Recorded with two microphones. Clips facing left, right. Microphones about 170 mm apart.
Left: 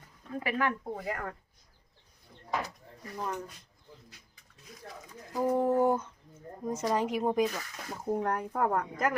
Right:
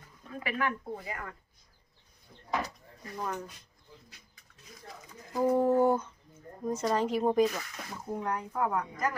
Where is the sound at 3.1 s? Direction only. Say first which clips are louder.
Even; centre (ahead or behind).